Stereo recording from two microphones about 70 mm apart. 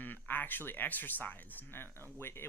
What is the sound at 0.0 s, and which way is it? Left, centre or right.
Speech, left.